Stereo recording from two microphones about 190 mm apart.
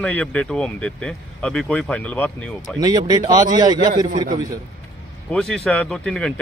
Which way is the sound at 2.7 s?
20° right (ahead or behind).